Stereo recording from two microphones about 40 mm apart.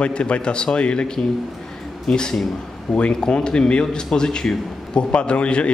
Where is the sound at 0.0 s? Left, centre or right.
Left.